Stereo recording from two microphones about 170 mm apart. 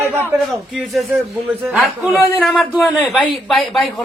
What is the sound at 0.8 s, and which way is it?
A man's voice, centre (ahead or behind).